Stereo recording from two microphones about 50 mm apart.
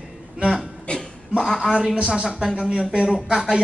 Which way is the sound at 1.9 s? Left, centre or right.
Right.